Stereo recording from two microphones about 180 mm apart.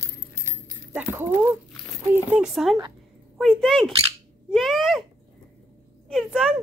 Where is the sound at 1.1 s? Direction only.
10° right (ahead or behind).